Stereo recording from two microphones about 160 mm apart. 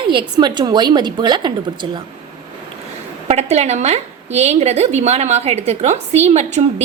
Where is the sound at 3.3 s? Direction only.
45° right (ahead or behind).